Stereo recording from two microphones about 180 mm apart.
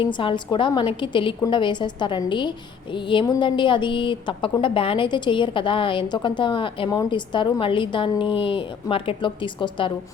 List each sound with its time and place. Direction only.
0.0 s speech: 25° left (ahead or behind)